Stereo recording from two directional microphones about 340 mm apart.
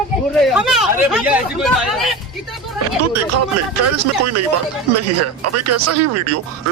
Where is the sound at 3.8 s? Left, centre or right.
Right.